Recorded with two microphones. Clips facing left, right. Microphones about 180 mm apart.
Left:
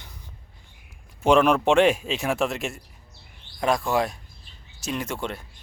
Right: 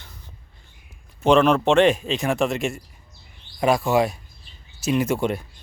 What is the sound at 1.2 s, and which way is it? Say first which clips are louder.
A man's voice: right 2 dB; 10° left (ahead or behind).